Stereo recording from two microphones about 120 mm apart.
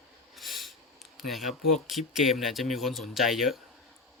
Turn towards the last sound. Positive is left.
turn(degrees=0)  # may be behind; listen again after turning